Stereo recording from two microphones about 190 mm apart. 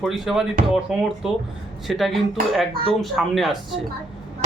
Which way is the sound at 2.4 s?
50° right (ahead or behind).